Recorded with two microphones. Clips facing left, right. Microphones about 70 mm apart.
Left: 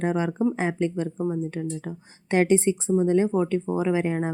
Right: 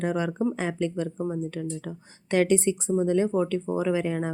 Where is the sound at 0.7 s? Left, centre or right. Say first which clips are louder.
Left 2 dB; left.